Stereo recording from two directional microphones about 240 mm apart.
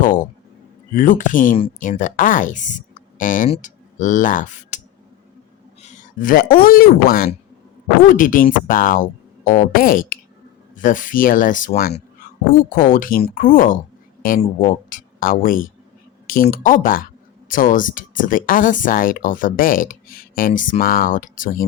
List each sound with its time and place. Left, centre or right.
0.9 s speech: left
5.8 s a sound: left
6.7 s speech: left